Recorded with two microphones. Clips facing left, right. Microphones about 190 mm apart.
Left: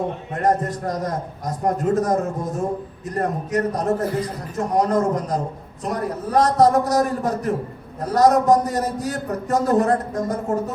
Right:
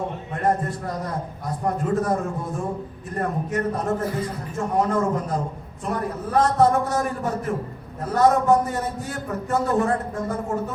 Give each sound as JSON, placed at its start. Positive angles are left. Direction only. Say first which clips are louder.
{"t": 0.4, "sound": "a man's voice", "louder": "left 3 dB", "side_deg": 40}